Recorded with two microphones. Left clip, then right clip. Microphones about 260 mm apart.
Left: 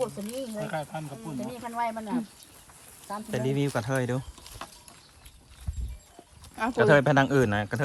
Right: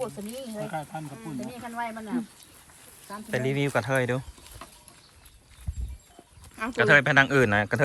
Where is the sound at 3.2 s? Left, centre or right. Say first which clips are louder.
Right 2 dB; centre.